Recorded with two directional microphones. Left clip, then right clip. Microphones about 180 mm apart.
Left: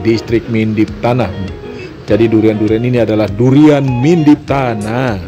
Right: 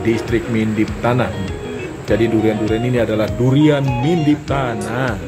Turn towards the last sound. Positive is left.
turn(degrees=45)  # may be behind; listen again after turning